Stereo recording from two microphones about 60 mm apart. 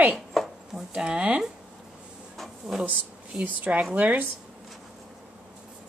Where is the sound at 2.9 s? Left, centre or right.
Right.